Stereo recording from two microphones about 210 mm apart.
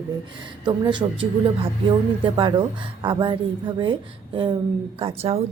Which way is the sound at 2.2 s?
25° right (ahead or behind).